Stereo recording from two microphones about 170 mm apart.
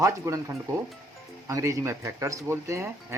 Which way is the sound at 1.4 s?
20° right (ahead or behind).